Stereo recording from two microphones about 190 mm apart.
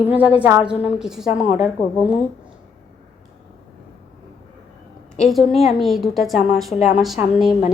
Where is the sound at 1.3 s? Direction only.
40° left (ahead or behind).